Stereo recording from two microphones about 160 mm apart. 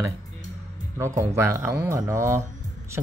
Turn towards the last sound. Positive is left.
turn(degrees=-15)  # may be behind; listen again after turning